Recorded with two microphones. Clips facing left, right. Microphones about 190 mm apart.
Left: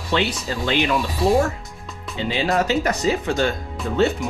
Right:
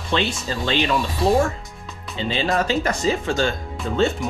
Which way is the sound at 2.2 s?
15° left (ahead or behind).